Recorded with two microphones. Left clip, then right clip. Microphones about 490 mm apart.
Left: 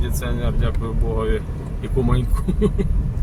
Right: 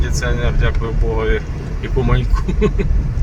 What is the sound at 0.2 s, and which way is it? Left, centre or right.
Speech, left.